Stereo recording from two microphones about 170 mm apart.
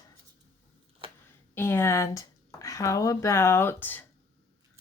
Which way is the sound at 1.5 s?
15° left (ahead or behind).